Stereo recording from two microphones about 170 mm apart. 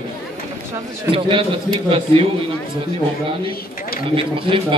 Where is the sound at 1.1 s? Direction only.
30° right (ahead or behind).